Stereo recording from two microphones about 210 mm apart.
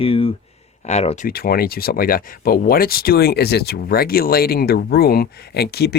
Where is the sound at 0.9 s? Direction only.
30° left (ahead or behind).